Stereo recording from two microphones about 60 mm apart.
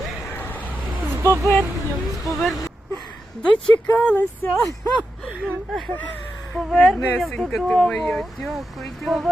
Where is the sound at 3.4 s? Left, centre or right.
Centre.